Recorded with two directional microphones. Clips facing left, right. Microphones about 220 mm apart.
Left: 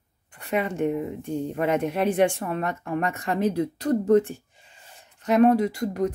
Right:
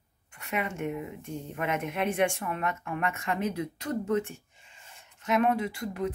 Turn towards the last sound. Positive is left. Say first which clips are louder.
# left 7 dB
turn(degrees=40)  # may be behind; listen again after turning